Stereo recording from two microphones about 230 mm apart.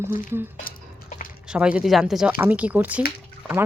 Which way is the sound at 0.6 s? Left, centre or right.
Left.